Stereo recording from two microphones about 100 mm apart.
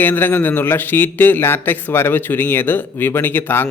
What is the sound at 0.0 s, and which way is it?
A man's voice, 20° left (ahead or behind).